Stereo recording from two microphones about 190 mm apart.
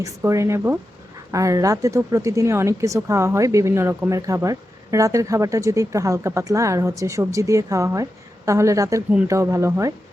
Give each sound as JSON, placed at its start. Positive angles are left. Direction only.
{"t": 0.0, "sound": "speech", "side_deg": -15}